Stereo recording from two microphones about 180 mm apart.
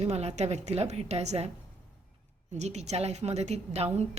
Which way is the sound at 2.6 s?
40° right (ahead or behind).